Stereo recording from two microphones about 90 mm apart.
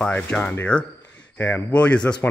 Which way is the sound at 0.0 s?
15° left (ahead or behind).